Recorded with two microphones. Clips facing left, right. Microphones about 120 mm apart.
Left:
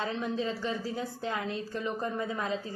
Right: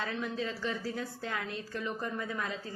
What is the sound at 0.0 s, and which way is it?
A woman's voice, 25° left (ahead or behind).